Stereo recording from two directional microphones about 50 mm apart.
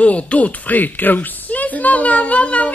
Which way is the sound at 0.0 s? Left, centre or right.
Left.